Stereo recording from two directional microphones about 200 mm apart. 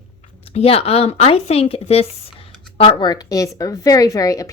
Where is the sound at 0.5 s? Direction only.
30° left (ahead or behind).